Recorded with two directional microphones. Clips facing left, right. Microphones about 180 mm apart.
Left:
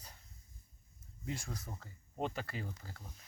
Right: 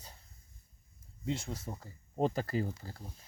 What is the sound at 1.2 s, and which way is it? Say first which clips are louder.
Speech: right 6 dB; 25° right (ahead or behind).